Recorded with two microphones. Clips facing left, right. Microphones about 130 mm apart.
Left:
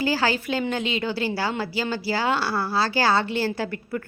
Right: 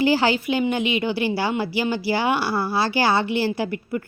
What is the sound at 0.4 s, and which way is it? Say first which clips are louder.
A woman's voice: right 4 dB; 15° right (ahead or behind).